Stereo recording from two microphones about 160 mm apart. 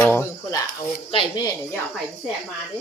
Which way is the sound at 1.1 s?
30° left (ahead or behind).